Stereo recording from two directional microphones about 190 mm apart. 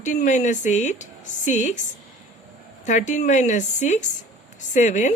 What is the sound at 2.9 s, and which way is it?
Speech, 40° left (ahead or behind).